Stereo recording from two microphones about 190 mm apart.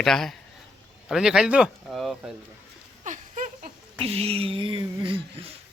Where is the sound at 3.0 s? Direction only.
40° right (ahead or behind).